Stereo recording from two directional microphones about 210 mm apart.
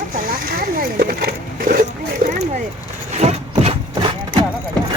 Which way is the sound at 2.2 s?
35° right (ahead or behind).